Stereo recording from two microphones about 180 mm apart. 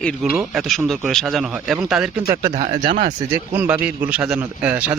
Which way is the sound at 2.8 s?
50° right (ahead or behind).